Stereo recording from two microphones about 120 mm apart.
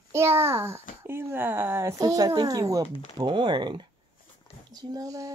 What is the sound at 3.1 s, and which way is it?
Speech, 40° right (ahead or behind).